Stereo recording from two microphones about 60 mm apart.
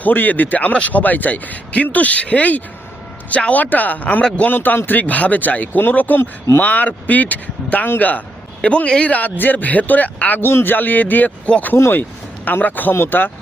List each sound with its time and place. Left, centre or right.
0.0 s speech: left
4.2 s speech: centre
4.4 s a man's voice: left
11.8 s a man's voice: left